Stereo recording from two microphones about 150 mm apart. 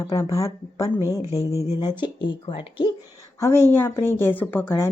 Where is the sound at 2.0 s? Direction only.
35° left (ahead or behind).